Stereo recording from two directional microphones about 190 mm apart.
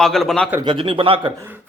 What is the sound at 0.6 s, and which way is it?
Speech, 25° right (ahead or behind).